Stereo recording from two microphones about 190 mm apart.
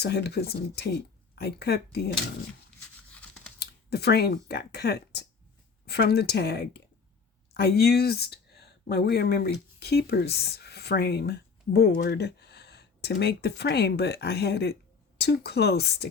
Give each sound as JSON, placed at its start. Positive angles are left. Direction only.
{"t": 0.0, "sound": "speech", "side_deg": 60}
{"t": 3.2, "sound": "computer keyboard", "side_deg": 5}
{"t": 3.6, "sound": "speech", "side_deg": 60}